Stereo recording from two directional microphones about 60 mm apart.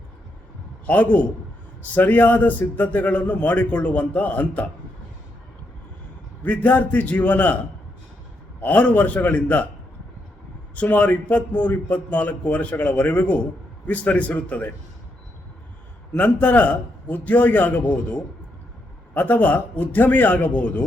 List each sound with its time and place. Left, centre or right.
0.9 s a man's voice: left
6.4 s a man's voice: left
8.6 s a man's voice: left
10.8 s a man's voice: left
16.1 s a man's voice: left